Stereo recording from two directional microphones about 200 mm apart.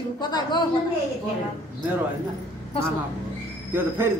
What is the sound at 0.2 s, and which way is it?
Speech, 20° left (ahead or behind).